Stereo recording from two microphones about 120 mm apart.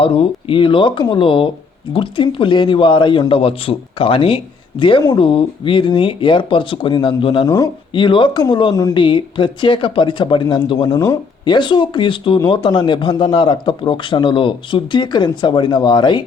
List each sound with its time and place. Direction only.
0.0 s a man's voice: 45° left (ahead or behind)
7.4 s a man's voice: 30° left (ahead or behind)
10.9 s speech: 25° left (ahead or behind)
11.4 s a man's voice: 40° left (ahead or behind)